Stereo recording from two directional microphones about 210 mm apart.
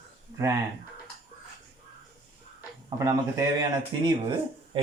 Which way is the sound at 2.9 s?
15° right (ahead or behind).